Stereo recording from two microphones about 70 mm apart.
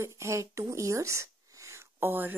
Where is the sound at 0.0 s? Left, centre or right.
Right.